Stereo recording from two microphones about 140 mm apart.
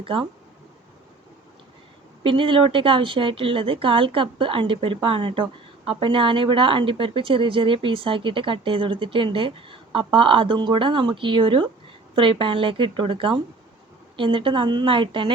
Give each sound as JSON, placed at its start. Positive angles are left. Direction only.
{"t": 0.0, "sound": "speech", "side_deg": -40}
{"t": 2.2, "sound": "speech", "side_deg": -40}